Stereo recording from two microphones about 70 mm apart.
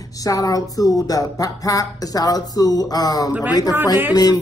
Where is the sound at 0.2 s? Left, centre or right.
Left.